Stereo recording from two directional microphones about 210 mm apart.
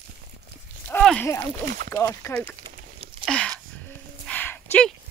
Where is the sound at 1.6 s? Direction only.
45° right (ahead or behind).